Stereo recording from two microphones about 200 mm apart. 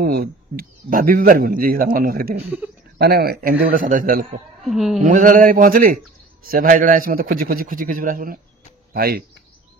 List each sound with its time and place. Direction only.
0.0 s speech: 50° right (ahead or behind)
2.4 s speech: 10° right (ahead or behind)
3.0 s speech: 50° right (ahead or behind)
4.6 s speech: centre (ahead or behind)
5.0 s speech: 40° right (ahead or behind)